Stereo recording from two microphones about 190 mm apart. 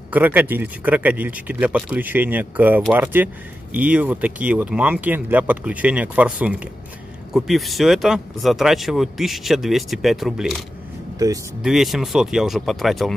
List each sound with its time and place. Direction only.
0.1 s speech: 10° right (ahead or behind)
11.2 s speech: 20° right (ahead or behind)
11.6 s speech: centre (ahead or behind)